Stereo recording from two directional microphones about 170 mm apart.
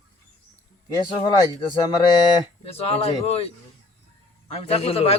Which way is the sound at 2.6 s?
35° left (ahead or behind).